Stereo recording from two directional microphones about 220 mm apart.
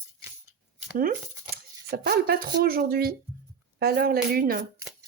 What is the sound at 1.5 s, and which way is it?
Speech, 45° right (ahead or behind).